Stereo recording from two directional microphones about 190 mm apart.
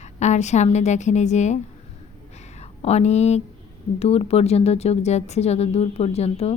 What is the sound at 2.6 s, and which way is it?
A woman's voice, 35° left (ahead or behind).